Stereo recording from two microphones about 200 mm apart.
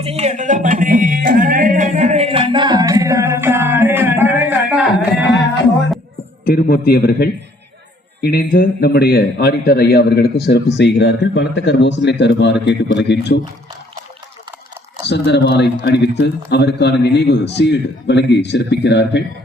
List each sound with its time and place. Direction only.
0.0 s music: 30° right (ahead or behind); by 5.5 s centre (ahead or behind)
6.4 s a man's voice: 45° left (ahead or behind)
10.8 s speech: 60° left (ahead or behind)
15.0 s speech: 60° left (ahead or behind)